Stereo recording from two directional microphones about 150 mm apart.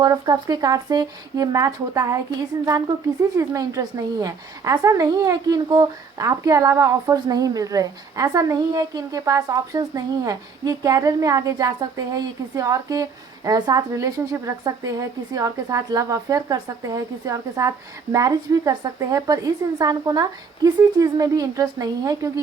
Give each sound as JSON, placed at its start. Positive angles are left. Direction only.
{"t": 0.0, "sound": "a woman's voice", "side_deg": -30}
{"t": 3.3, "sound": "a woman's voice", "side_deg": -25}